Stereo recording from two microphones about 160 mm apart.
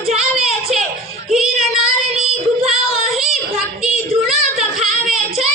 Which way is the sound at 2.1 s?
35° right (ahead or behind).